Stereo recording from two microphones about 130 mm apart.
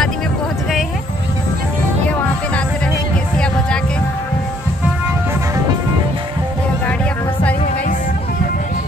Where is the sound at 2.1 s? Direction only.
10° left (ahead or behind).